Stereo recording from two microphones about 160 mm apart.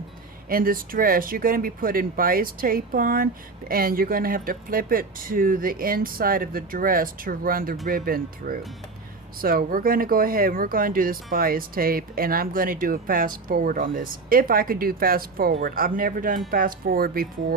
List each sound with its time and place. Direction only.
0.4 s speech: 65° right (ahead or behind)